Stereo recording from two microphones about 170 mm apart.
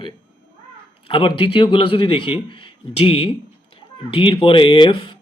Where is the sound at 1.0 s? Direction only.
30° left (ahead or behind).